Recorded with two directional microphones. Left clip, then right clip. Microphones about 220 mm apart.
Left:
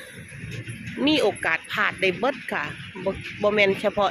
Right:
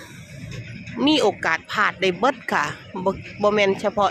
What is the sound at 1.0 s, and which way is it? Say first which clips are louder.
Speech: right 3 dB; 15° right (ahead or behind).